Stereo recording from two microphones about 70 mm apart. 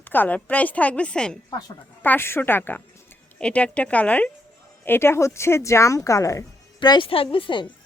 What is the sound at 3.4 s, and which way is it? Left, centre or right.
Speech, centre.